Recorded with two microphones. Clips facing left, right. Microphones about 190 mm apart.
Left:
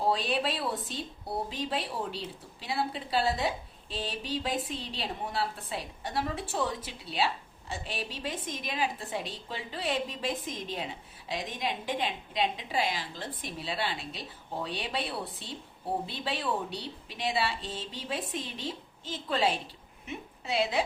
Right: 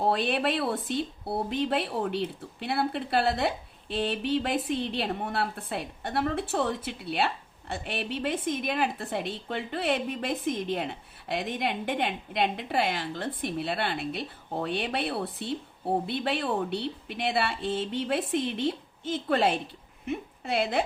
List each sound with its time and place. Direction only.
0.0 s a woman's voice: 60° right (ahead or behind)